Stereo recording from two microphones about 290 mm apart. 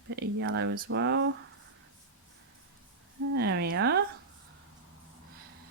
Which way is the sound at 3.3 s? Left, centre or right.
Right.